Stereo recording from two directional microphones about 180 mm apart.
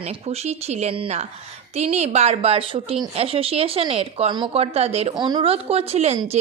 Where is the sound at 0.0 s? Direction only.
35° right (ahead or behind).